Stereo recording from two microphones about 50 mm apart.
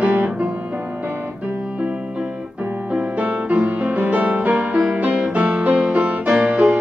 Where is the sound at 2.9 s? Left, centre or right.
Right.